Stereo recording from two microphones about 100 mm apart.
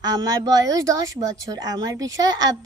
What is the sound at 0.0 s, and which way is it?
Speech, 40° right (ahead or behind).